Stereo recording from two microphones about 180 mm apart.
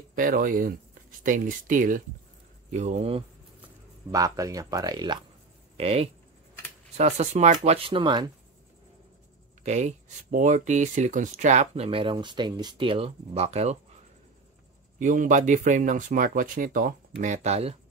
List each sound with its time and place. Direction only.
0.1 s speech: 50° right (ahead or behind); by 3.3 s 35° right (ahead or behind)
4.1 s speech: 20° right (ahead or behind)
5.8 s speech: 35° right (ahead or behind)
9.6 s speech: 40° right (ahead or behind)
15.0 s speech: 45° right (ahead or behind)